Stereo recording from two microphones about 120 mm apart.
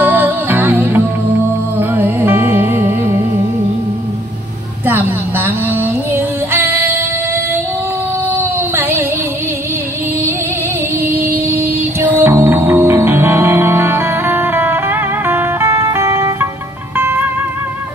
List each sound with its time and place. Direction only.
0.0 s music: 15° right (ahead or behind)
4.8 s music: 20° right (ahead or behind)
8.3 s a sound: 20° right (ahead or behind)
11.0 s music: 20° right (ahead or behind)